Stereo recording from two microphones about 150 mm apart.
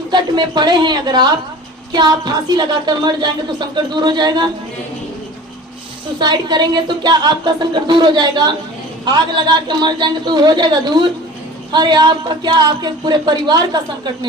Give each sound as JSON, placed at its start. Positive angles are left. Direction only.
{"t": 0.1, "sound": "a woman's voice", "side_deg": -30}
{"t": 6.1, "sound": "a woman's voice", "side_deg": -30}